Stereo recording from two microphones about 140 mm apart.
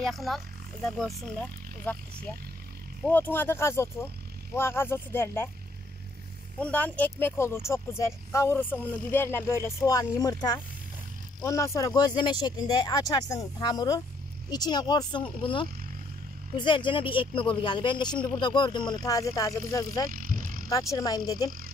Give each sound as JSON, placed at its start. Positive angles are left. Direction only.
{"t": 0.0, "sound": "speech", "side_deg": 0}
{"t": 3.1, "sound": "speech", "side_deg": 15}
{"t": 6.6, "sound": "speech", "side_deg": 10}
{"t": 20.1, "sound": "vehicle", "side_deg": -80}
{"t": 20.7, "sound": "speech", "side_deg": 25}